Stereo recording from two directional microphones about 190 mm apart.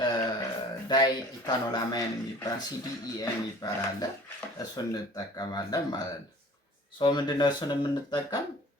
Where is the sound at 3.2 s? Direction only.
20° left (ahead or behind).